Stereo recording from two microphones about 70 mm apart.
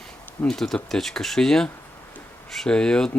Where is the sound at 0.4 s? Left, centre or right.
Centre.